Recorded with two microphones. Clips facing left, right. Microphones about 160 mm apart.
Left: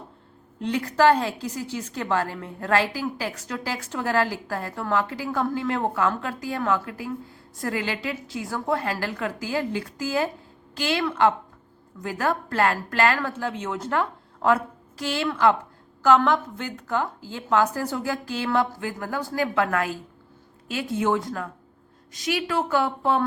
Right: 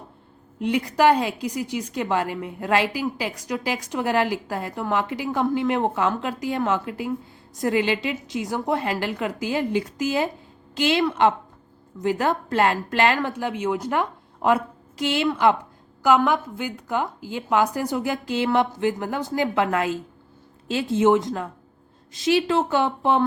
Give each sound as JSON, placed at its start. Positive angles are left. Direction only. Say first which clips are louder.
{"t": 0.6, "sound": "a woman's voice", "louder": "right 1 dB", "side_deg": -15}